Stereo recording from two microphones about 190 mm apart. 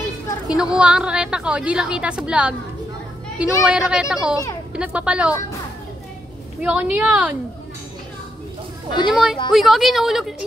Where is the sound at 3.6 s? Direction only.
5° right (ahead or behind).